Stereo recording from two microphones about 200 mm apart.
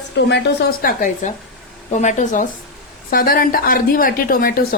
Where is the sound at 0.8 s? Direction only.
45° left (ahead or behind).